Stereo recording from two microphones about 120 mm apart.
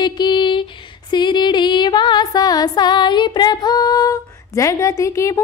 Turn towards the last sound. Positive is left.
turn(degrees=25)  # may be behind; listen again after turning